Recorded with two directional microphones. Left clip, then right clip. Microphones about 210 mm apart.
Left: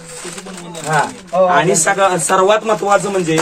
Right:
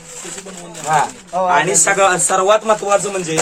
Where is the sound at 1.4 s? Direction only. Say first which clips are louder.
Left 2 dB; centre (ahead or behind).